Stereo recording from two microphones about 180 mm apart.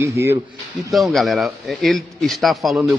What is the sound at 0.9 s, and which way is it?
Speech, centre (ahead or behind).